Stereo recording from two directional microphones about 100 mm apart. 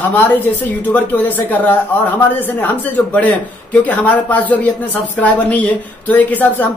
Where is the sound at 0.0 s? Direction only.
20° left (ahead or behind).